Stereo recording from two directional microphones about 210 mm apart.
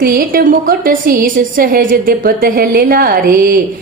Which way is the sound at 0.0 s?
45° right (ahead or behind).